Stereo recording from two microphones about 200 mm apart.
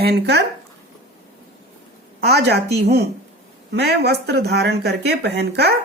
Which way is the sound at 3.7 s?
55° right (ahead or behind).